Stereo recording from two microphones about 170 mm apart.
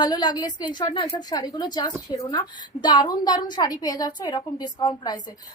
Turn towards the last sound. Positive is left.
turn(degrees=25)  # may be behind; listen again after turning